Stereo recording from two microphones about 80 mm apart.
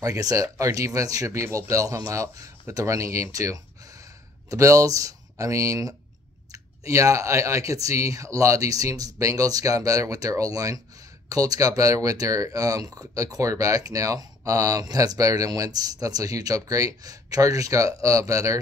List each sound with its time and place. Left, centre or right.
0.0 s speech: right